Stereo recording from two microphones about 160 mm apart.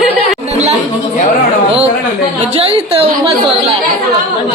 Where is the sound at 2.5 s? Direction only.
35° right (ahead or behind).